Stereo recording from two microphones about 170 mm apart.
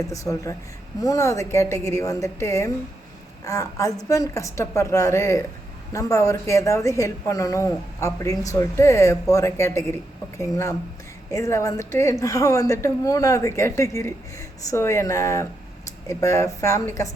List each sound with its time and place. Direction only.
0.1 s speech: 20° left (ahead or behind)